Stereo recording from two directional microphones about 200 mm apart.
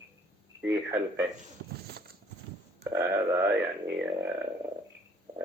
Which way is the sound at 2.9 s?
15° right (ahead or behind).